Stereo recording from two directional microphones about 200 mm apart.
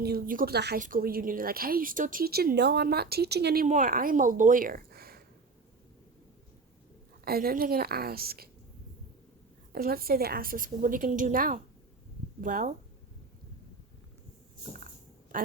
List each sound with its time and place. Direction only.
0.0 s a woman's voice: 50° right (ahead or behind)
7.3 s a woman's voice: 50° right (ahead or behind)
9.7 s a woman's voice: 50° right (ahead or behind)